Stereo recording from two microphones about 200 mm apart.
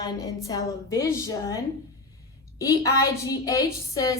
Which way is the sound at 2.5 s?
15° left (ahead or behind).